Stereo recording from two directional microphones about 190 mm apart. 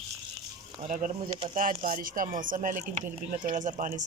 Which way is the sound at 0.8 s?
45° right (ahead or behind).